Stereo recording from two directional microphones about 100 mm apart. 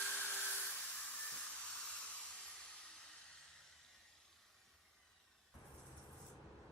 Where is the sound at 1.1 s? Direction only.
10° left (ahead or behind).